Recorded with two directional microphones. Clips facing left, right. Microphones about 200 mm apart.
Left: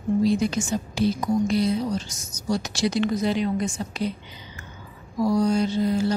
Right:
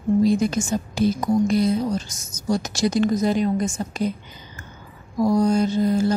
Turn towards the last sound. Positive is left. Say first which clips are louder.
# right 3 dB
turn(degrees=-45)  # may be behind; listen again after turning